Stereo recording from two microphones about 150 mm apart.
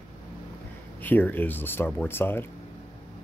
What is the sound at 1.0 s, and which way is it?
Speech, 10° left (ahead or behind).